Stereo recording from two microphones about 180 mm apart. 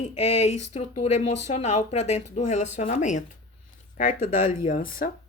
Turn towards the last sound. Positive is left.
turn(degrees=50)  # may be behind; listen again after turning